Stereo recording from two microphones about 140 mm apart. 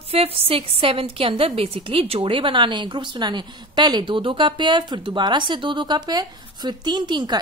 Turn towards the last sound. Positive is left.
turn(degrees=-30)  # may be behind; listen again after turning